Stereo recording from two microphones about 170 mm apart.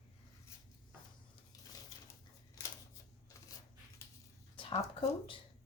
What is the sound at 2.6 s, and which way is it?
Scissors, 20° left (ahead or behind).